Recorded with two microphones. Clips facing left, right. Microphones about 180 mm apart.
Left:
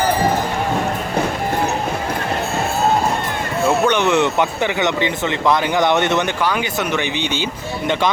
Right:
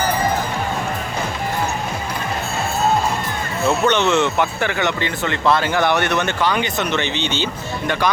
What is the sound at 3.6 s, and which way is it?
Speech, 10° left (ahead or behind).